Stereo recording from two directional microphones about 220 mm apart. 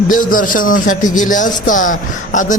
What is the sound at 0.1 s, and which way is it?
A man's voice, 40° left (ahead or behind).